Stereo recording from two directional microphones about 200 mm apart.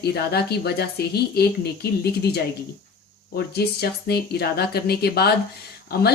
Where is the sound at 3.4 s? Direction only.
55° left (ahead or behind).